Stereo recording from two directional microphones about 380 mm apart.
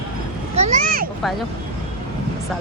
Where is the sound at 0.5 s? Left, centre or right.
Right.